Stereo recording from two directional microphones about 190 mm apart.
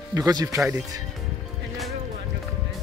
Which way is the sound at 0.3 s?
20° right (ahead or behind).